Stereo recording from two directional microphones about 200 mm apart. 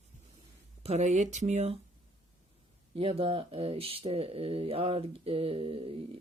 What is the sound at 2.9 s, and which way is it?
Speech, 30° right (ahead or behind).